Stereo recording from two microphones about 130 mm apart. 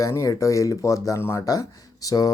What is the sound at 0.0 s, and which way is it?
Speech, 25° left (ahead or behind).